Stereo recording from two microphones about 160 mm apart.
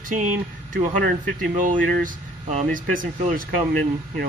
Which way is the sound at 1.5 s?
55° right (ahead or behind).